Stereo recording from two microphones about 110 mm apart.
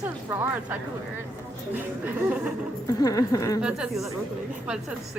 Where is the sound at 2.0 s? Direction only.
15° right (ahead or behind).